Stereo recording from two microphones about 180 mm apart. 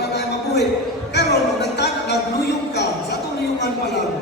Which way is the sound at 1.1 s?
70° left (ahead or behind).